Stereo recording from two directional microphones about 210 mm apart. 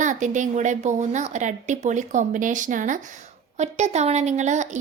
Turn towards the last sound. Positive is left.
turn(degrees=-35)  # may be behind; listen again after turning